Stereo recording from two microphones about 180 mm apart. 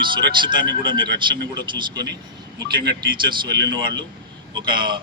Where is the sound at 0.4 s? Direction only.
25° right (ahead or behind).